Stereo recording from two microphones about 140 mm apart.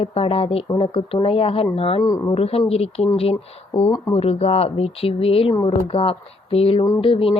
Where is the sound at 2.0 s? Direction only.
25° left (ahead or behind).